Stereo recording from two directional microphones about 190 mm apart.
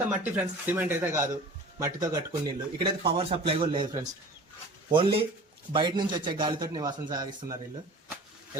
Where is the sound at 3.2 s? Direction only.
30° right (ahead or behind).